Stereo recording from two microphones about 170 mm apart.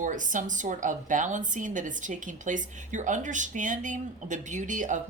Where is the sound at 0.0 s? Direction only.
50° right (ahead or behind).